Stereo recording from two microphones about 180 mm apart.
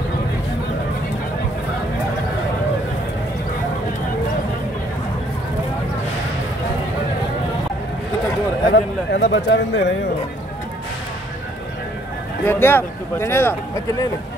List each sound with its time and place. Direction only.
8.7 s a man's voice: 75° left (ahead or behind)
12.4 s speech: 10° left (ahead or behind)